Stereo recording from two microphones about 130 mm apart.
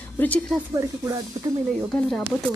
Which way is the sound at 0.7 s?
25° right (ahead or behind).